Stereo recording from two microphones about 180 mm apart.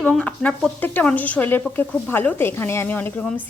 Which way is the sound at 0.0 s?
5° left (ahead or behind).